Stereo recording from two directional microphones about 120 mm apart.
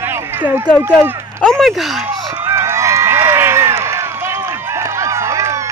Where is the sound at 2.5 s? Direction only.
25° right (ahead or behind).